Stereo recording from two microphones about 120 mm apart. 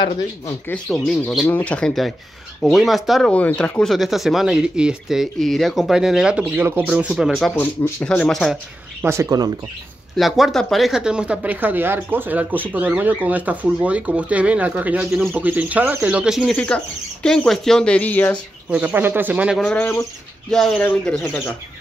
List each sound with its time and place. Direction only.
0.8 s speech: 5° left (ahead or behind)
3.3 s speech: 10° left (ahead or behind)
7.5 s speech: 15° left (ahead or behind)
9.0 s speech: 25° right (ahead or behind)
10.1 s speech: centre (ahead or behind)
16.5 s speech: 10° left (ahead or behind)
18.7 s speech: 10° right (ahead or behind)
19.7 s speech: 15° left (ahead or behind)
20.4 s speech: 5° left (ahead or behind)